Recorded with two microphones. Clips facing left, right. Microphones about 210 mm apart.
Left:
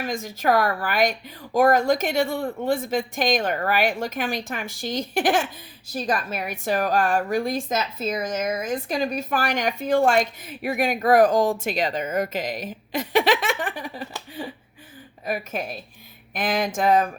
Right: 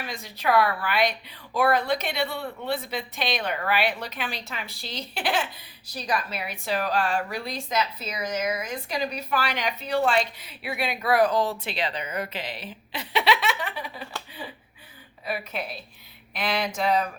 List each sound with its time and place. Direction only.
0.0 s a woman's voice: 45° left (ahead or behind)